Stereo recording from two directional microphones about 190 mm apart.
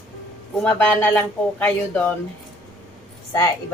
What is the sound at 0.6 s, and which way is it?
Speech, 5° left (ahead or behind).